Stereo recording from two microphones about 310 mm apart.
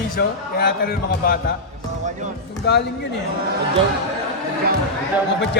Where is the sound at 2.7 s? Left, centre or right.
Left.